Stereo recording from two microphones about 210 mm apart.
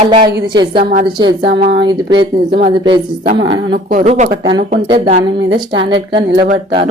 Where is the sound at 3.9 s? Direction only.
35° right (ahead or behind).